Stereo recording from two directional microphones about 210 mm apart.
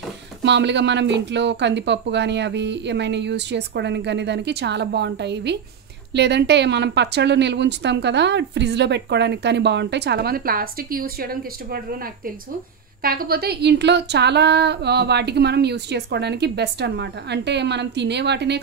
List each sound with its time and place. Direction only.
0.4 s speech: 55° right (ahead or behind)